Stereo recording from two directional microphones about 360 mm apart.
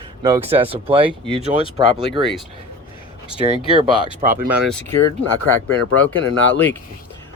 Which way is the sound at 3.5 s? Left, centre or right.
Centre.